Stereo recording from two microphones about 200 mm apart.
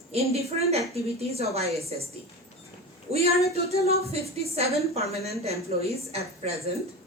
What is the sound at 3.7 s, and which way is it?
Speech, 50° left (ahead or behind).